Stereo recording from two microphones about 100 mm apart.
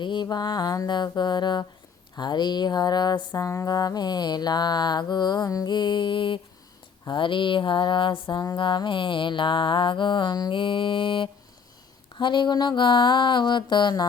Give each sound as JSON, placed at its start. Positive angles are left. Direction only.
{"t": 0.0, "sound": "mantra", "side_deg": 50}
{"t": 7.1, "sound": "a sound", "side_deg": 55}
{"t": 12.1, "sound": "mantra", "side_deg": 50}